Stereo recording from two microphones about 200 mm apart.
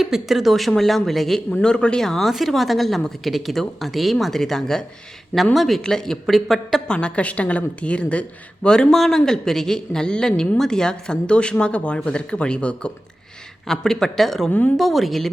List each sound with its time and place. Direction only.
0.0 s speech: centre (ahead or behind)